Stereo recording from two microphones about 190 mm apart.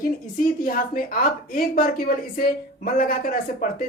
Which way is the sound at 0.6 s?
50° left (ahead or behind).